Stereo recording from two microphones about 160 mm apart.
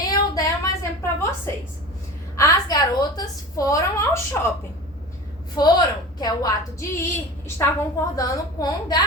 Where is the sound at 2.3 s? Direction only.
20° left (ahead or behind).